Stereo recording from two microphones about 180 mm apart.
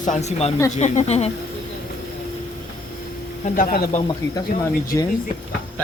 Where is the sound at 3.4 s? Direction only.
50° left (ahead or behind).